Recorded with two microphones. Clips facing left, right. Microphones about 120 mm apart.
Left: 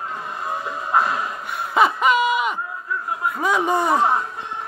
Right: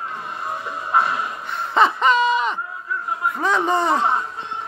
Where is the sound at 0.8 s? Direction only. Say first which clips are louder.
Even; 10° left (ahead or behind).